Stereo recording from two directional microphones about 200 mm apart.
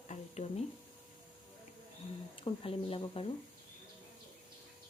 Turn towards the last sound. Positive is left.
turn(degrees=25)  # may be behind; listen again after turning